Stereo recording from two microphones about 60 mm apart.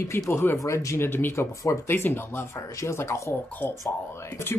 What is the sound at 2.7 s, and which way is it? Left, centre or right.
Speech, left.